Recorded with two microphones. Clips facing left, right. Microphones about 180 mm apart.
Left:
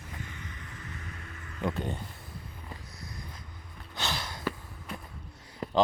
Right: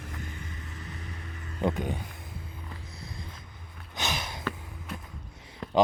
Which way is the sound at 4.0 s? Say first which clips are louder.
Right 2 dB; 20° right (ahead or behind).